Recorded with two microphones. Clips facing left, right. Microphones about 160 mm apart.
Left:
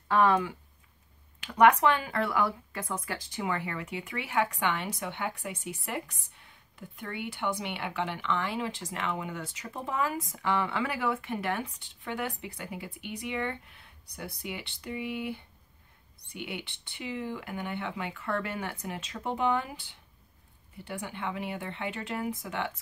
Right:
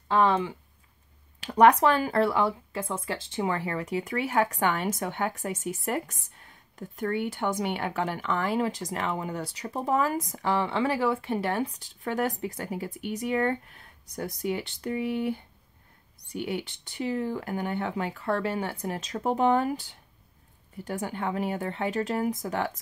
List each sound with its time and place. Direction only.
0.1 s speech: 25° right (ahead or behind)